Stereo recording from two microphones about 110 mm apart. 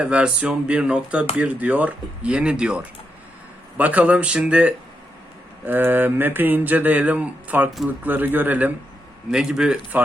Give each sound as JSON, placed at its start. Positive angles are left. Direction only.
{"t": 0.0, "sound": "speech", "side_deg": -10}